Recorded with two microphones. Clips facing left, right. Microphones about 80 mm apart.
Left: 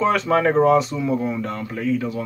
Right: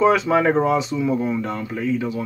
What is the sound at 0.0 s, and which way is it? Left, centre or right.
Speech, centre.